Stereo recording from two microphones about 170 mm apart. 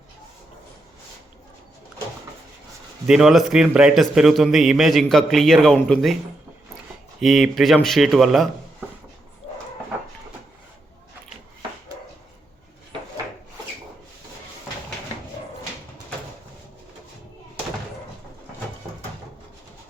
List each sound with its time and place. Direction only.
3.1 s a man's voice: 5° right (ahead or behind)
7.2 s a man's voice: centre (ahead or behind)